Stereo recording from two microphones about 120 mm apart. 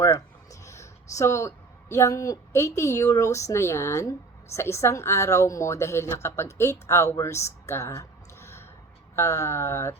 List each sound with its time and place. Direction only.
0.6 s a woman's voice: 25° left (ahead or behind)